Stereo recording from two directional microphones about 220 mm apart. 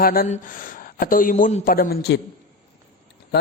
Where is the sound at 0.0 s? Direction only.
40° left (ahead or behind).